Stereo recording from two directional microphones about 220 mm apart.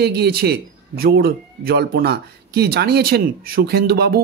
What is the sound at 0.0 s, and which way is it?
Speech, 45° right (ahead or behind).